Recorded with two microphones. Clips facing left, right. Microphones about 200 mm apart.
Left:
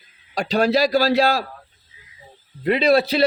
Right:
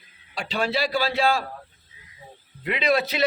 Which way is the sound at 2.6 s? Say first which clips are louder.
Left 6 dB; 35° left (ahead or behind).